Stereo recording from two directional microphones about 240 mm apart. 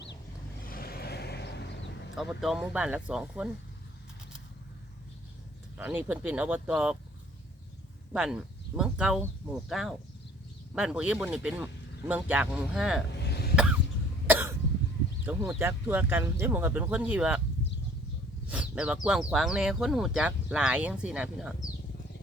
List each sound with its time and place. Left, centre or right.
0.7 s vehicle: left
2.1 s speech: centre
5.7 s speech: centre
8.1 s speech: centre
13.1 s cough: left
14.3 s cough: centre
15.2 s speech: centre
18.4 s speech: centre